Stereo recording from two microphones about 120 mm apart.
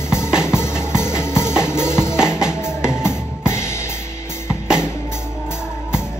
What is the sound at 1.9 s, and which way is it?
Music, 5° right (ahead or behind).